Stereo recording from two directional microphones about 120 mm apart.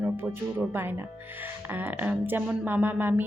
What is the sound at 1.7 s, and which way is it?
A woman's voice, 15° right (ahead or behind).